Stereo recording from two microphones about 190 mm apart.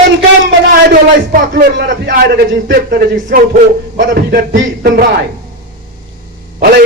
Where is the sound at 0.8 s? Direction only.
50° right (ahead or behind).